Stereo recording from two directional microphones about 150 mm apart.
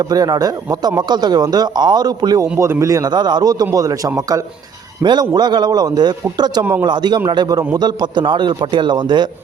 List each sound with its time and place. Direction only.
0.1 s a man's voice: 25° right (ahead or behind)